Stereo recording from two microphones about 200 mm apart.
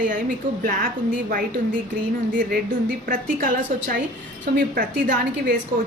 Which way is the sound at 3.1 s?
45° right (ahead or behind).